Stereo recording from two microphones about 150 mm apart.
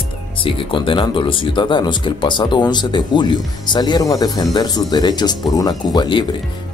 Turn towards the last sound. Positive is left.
turn(degrees=30)  # may be behind; listen again after turning